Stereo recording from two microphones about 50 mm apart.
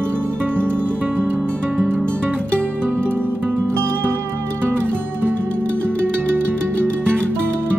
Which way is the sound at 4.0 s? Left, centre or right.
Right.